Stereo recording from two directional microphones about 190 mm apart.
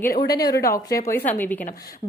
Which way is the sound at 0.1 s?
50° left (ahead or behind).